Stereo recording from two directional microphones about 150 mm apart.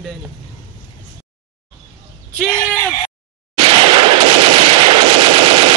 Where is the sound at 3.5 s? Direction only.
35° right (ahead or behind).